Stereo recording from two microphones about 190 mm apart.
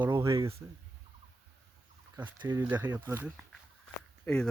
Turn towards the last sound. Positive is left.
turn(degrees=5)  # may be behind; listen again after turning